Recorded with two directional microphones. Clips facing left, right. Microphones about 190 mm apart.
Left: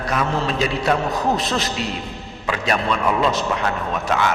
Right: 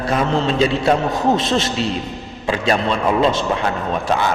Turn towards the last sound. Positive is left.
turn(degrees=-30)  # may be behind; listen again after turning